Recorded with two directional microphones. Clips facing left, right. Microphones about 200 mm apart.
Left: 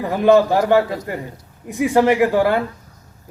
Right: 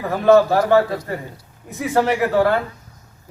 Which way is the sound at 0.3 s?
15° left (ahead or behind).